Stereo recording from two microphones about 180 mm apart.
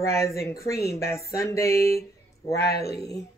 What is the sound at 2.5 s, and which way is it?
Speech, 60° left (ahead or behind).